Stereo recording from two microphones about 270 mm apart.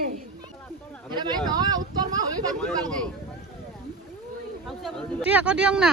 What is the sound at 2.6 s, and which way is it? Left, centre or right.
Speech, centre.